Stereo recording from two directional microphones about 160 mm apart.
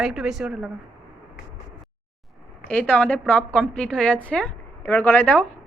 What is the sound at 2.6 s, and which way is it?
A woman's voice, 10° left (ahead or behind).